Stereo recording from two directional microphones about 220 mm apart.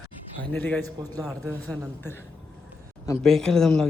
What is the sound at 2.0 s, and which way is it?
Speech, 10° left (ahead or behind).